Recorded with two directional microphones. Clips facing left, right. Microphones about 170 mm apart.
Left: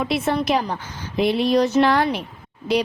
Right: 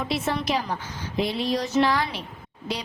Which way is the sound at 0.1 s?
55° left (ahead or behind).